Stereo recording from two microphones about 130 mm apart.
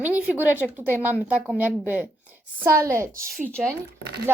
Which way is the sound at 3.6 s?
5° right (ahead or behind).